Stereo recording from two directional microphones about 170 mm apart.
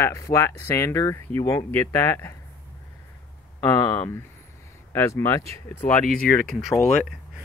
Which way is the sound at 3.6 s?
20° left (ahead or behind).